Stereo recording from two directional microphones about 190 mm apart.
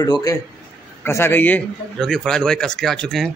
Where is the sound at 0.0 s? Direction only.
20° left (ahead or behind).